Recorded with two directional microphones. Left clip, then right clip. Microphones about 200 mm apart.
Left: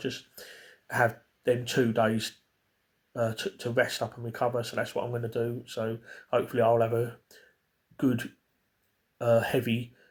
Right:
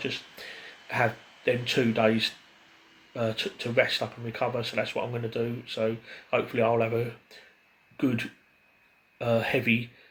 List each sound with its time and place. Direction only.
0.0 s speech: 45° left (ahead or behind)
1.5 s speech: 45° left (ahead or behind)